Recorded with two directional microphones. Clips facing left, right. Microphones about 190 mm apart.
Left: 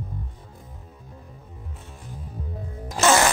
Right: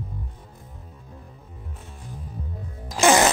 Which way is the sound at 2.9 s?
15° right (ahead or behind).